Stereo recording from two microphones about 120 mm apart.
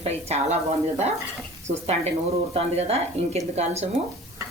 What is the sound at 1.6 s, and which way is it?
A woman's voice, 65° right (ahead or behind).